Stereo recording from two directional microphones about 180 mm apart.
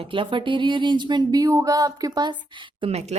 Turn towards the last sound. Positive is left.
turn(degrees=-35)  # may be behind; listen again after turning